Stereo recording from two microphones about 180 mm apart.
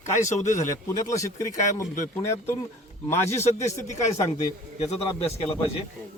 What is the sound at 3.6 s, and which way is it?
Speech, 15° left (ahead or behind).